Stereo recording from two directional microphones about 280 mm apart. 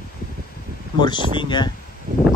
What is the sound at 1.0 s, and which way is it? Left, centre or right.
Speech, centre.